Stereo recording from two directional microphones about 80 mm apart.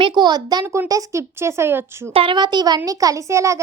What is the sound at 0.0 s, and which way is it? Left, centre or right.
Speech, right.